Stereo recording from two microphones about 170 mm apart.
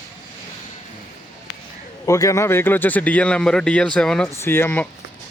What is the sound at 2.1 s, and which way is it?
Speech, 20° left (ahead or behind).